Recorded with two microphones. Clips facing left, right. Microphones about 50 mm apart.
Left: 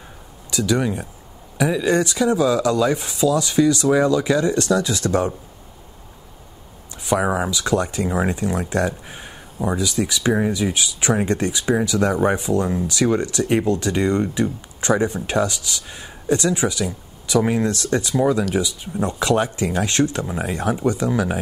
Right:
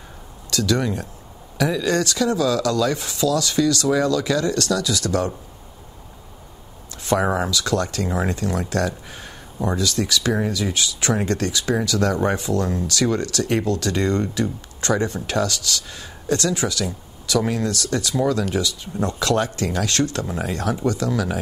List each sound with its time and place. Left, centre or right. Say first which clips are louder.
0.5 s speech: left 1 dB; centre
7.1 s speech: even; centre